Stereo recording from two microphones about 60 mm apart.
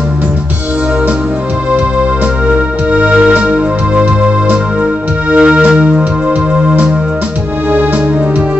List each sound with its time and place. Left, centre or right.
1.7 s music: right
5.3 s keyboard: centre